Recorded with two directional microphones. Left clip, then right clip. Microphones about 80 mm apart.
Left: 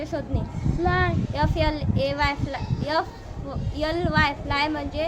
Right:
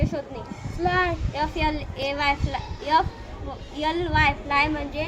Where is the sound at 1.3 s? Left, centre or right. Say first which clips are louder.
Even; left.